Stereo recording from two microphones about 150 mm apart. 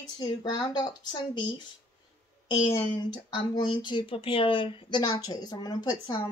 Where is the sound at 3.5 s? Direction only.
30° left (ahead or behind).